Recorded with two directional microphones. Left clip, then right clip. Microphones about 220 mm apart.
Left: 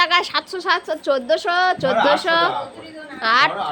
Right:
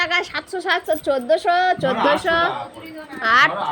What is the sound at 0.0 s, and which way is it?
A woman's voice, 10° left (ahead or behind).